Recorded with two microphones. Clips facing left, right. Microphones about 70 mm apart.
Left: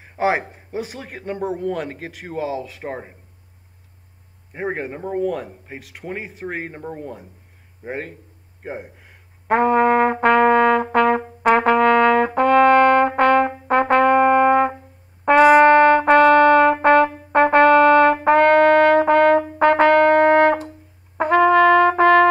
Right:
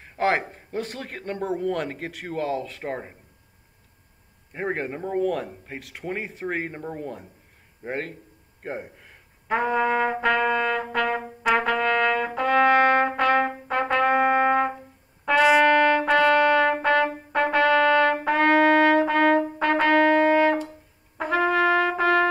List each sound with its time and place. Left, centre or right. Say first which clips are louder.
0.0 s a man's voice: left 3 dB; centre
4.5 s a man's voice: left 2 dB; centre
9.5 s trumpet: left 7 dB; left
21.2 s brass instrument: left 8 dB; left